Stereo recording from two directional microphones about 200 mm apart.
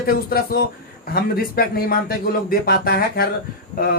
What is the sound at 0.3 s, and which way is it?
A man's voice, 50° left (ahead or behind).